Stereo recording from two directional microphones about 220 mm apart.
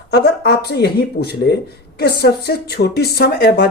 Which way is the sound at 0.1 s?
45° left (ahead or behind).